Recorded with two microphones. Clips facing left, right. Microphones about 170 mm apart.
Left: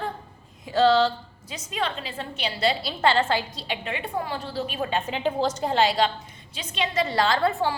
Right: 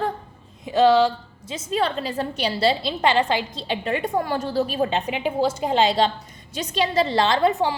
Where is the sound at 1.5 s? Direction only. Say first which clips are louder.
Right 6 dB; 35° right (ahead or behind).